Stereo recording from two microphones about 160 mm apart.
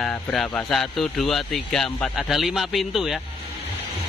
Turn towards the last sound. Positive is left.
turn(degrees=0)  # may be behind; listen again after turning